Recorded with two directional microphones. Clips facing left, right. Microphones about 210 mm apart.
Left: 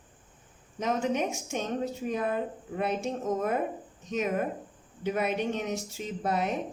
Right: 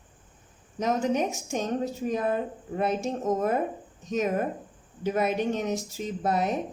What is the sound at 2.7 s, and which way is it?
A woman's voice, 40° right (ahead or behind).